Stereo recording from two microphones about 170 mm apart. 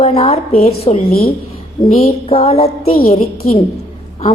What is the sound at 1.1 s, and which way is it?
Speech, 60° left (ahead or behind).